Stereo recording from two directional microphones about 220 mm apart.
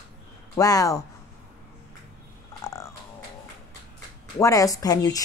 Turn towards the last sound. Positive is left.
turn(degrees=15)  # may be behind; listen again after turning